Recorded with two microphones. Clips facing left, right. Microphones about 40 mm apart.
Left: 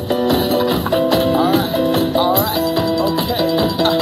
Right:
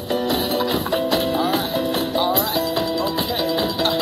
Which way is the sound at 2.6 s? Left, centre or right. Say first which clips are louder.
Left 5 dB; centre.